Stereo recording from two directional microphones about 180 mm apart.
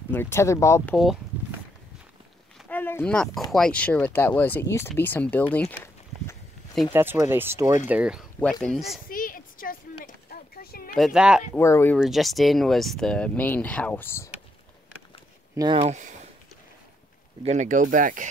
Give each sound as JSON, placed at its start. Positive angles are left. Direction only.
{"t": 0.1, "sound": "speech", "side_deg": 15}
{"t": 2.7, "sound": "speech", "side_deg": 10}
{"t": 6.9, "sound": "speech", "side_deg": -10}
{"t": 9.1, "sound": "a sound", "side_deg": 50}
{"t": 11.1, "sound": "speech", "side_deg": -5}
{"t": 11.5, "sound": "speech", "side_deg": 15}
{"t": 12.0, "sound": "speech", "side_deg": 0}
{"t": 15.5, "sound": "speech", "side_deg": -20}
{"t": 15.8, "sound": "speech", "side_deg": -40}
{"t": 17.5, "sound": "speech", "side_deg": -45}